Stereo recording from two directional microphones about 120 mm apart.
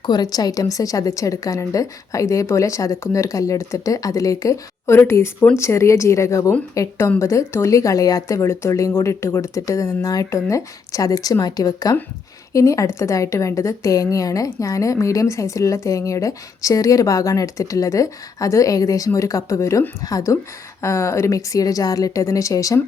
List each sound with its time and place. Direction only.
0.0 s a woman's voice: 35° left (ahead or behind)